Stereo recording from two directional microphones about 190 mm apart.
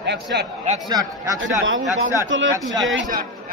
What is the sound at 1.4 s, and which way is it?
A man's voice, 80° right.